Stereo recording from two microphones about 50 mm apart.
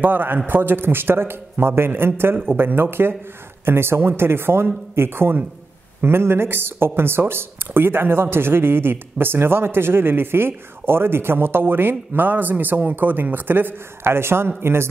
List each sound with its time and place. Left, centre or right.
0.0 s a man's voice: right